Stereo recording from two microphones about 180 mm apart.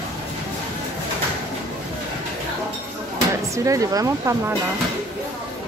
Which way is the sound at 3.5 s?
15° right (ahead or behind).